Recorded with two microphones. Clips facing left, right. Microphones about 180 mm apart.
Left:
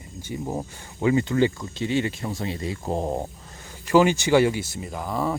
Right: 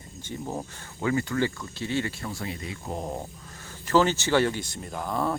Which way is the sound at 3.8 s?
15° left (ahead or behind).